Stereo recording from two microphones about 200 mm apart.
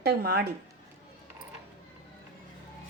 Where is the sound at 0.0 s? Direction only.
55° right (ahead or behind).